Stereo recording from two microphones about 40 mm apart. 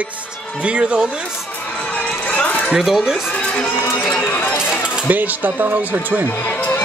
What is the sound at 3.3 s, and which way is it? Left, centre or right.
Music, left.